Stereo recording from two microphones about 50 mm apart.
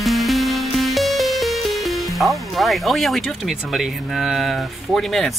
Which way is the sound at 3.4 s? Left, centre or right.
Centre.